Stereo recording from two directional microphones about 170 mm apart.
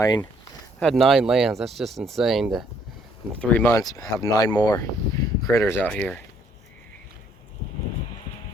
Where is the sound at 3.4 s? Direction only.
10° left (ahead or behind).